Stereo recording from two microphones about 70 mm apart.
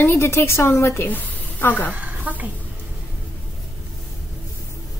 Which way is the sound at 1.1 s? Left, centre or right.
Left.